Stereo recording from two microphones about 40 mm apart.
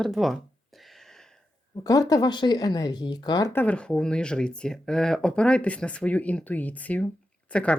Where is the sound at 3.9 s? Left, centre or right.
Centre.